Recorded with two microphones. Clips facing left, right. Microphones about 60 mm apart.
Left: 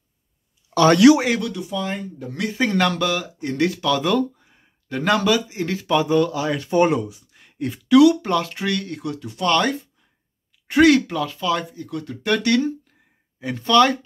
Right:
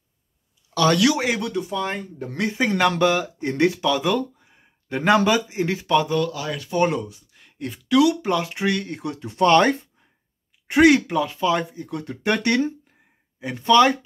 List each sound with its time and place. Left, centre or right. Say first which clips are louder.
0.7 s speech: left 6 dB; left
1.4 s speech: right 1 dB; right
2.5 s speech: left 1 dB; centre
2.9 s speech: right 3 dB; right; by 4.6 s centre
4.8 s speech: right 1 dB; right
6.0 s speech: left 4 dB; centre
6.8 s speech: left 3 dB; centre; by 9.8 s right
10.7 s speech: even; centre
13.4 s speech: even; centre